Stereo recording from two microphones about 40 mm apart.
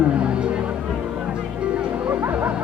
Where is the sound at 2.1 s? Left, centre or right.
Right.